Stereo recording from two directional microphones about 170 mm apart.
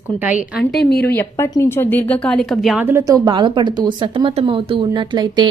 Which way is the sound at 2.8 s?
15° right (ahead or behind).